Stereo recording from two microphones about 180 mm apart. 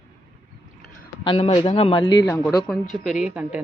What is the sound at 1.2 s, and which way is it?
Speech, 30° left (ahead or behind).